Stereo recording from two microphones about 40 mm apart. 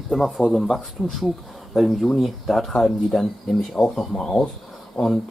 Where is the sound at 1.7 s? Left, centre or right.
Centre.